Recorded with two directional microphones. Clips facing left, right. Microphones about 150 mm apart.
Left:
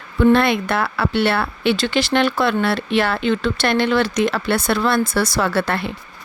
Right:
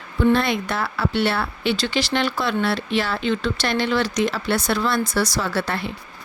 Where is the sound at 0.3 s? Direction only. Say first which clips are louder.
Left 4 dB; 60° left (ahead or behind).